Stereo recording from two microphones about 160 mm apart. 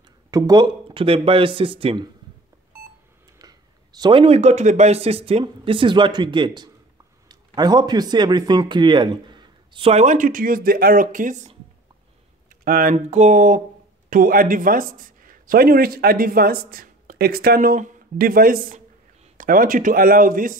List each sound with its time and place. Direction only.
0.3 s speech: 25° right (ahead or behind)
3.3 s speech: 25° right (ahead or behind); by 11.5 s 50° right (ahead or behind)
12.4 s a sound: 60° right (ahead or behind)
12.9 s mantra: 45° right (ahead or behind)
14.1 s speech: 60° right (ahead or behind)